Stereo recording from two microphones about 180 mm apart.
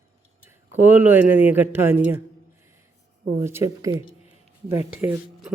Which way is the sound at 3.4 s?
15° right (ahead or behind).